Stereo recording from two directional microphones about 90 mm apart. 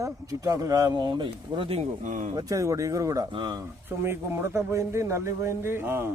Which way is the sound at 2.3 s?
40° right (ahead or behind).